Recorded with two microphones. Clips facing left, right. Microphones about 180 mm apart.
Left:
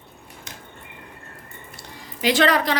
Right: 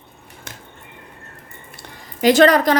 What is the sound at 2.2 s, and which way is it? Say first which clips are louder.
Speech: right 7 dB; 45° right (ahead or behind).